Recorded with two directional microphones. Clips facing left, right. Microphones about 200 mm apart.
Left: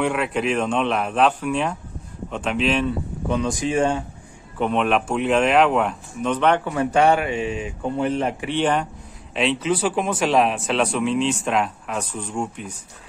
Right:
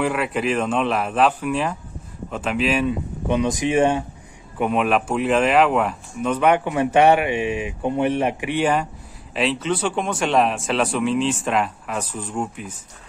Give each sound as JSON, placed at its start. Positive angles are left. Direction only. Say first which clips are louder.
{"t": 0.0, "sound": "speech", "louder": "even", "side_deg": 0}
{"t": 3.3, "sound": "speech", "louder": "right 2 dB", "side_deg": -15}
{"t": 4.6, "sound": "speech", "louder": "right 1 dB", "side_deg": -5}